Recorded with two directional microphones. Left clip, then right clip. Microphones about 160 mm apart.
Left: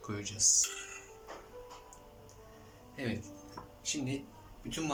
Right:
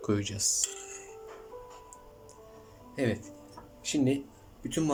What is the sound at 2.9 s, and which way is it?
Speech, 40° right (ahead or behind).